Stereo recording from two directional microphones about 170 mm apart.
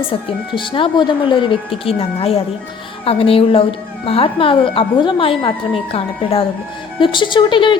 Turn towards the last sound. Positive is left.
turn(degrees=30)  # may be behind; listen again after turning